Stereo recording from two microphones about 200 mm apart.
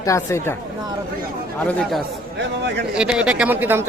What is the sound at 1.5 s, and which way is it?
Speech, 5° left (ahead or behind).